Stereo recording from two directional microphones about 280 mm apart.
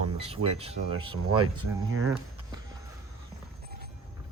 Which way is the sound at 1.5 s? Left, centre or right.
Right.